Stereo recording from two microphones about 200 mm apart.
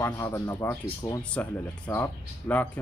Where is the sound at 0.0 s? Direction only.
15° left (ahead or behind).